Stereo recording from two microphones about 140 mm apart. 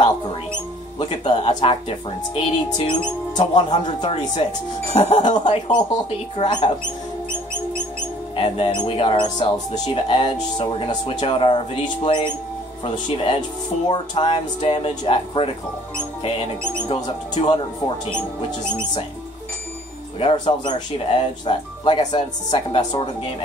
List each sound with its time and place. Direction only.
0.9 s speech: 35° left (ahead or behind)
8.4 s speech: 40° left (ahead or behind)
16.8 s speech: 30° left (ahead or behind)
20.2 s speech: 35° left (ahead or behind)